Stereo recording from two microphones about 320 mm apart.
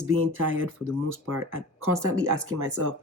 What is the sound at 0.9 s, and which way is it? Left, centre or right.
Speech, centre.